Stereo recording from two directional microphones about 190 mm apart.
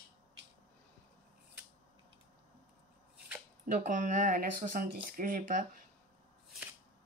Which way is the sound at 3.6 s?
45° right (ahead or behind).